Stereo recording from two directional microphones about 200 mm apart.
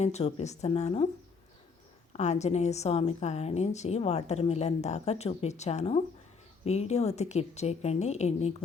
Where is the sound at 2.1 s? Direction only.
35° left (ahead or behind).